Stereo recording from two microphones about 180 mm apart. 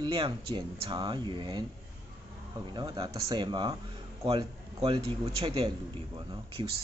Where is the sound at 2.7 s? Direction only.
20° right (ahead or behind).